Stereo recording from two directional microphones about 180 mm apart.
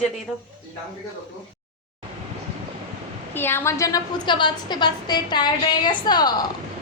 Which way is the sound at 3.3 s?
15° left (ahead or behind).